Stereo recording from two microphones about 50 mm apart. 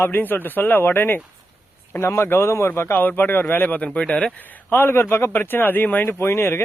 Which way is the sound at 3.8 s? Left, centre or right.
Left.